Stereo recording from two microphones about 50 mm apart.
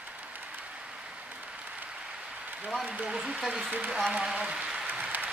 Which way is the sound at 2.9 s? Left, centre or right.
Centre.